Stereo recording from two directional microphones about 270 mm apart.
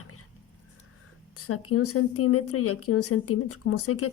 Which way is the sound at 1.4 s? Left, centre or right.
Left.